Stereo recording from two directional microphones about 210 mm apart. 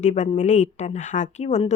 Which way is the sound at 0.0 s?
35° left (ahead or behind).